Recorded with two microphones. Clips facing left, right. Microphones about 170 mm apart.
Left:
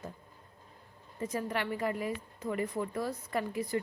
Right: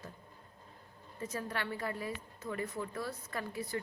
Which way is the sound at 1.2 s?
15° left (ahead or behind).